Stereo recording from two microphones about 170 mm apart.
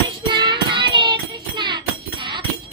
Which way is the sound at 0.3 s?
25° right (ahead or behind).